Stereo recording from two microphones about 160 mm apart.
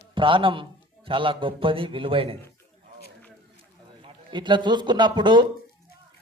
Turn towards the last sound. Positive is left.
turn(degrees=-30)  # may be behind; listen again after turning